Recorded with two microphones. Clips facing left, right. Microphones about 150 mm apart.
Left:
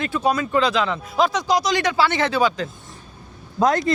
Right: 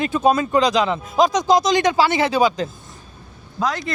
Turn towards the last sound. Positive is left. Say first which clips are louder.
# left 5 dB
turn(degrees=50)  # may be behind; listen again after turning